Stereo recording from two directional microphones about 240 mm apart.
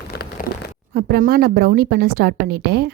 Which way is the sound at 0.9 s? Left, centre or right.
Right.